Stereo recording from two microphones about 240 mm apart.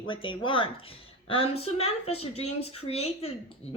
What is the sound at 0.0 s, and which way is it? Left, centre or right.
A woman's voice, left.